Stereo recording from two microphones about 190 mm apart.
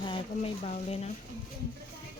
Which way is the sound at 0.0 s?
30° left (ahead or behind).